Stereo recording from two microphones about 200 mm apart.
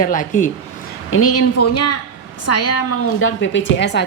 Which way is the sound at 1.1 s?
90° left.